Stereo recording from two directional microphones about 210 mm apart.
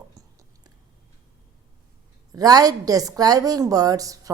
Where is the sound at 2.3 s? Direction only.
20° right (ahead or behind).